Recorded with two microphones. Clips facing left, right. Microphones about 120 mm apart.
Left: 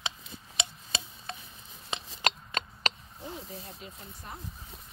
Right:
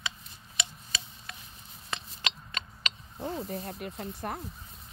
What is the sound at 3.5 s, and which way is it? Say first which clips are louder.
Speech: right 7 dB; 65° right (ahead or behind).